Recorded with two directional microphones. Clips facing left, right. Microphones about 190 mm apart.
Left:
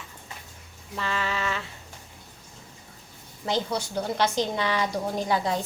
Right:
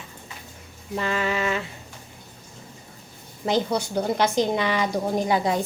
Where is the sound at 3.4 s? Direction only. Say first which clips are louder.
Right 4 dB; 15° right (ahead or behind).